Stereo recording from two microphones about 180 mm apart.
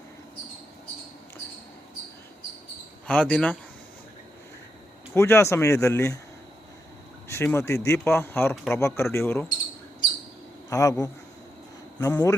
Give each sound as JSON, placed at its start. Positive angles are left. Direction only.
{"t": 3.1, "sound": "speech", "side_deg": 5}
{"t": 5.1, "sound": "speech", "side_deg": 15}
{"t": 7.3, "sound": "speech", "side_deg": 15}
{"t": 10.7, "sound": "speech", "side_deg": 20}